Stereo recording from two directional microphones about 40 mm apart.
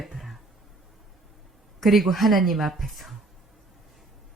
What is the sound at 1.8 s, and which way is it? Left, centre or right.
Speech, centre.